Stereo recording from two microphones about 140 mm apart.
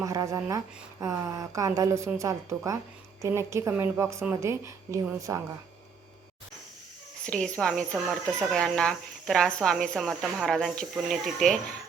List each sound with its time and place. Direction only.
0.0 s a woman's voice: 25° right (ahead or behind)
7.3 s speech: 5° left (ahead or behind)